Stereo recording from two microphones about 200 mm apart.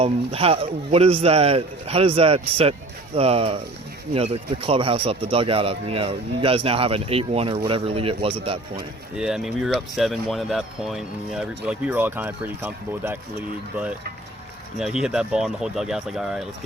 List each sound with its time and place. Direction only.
0.0 s speech: 30° right (ahead or behind)
9.1 s speech: 5° right (ahead or behind)
15.0 s speech: 5° right (ahead or behind)